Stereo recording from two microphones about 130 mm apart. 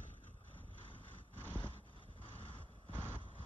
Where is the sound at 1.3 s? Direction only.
15° left (ahead or behind).